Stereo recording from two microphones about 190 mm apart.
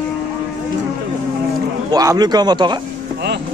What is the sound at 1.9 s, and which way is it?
Speech, 20° right (ahead or behind).